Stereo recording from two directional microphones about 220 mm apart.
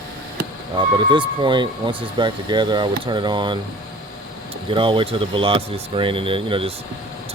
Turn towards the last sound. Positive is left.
turn(degrees=-25)  # may be behind; listen again after turning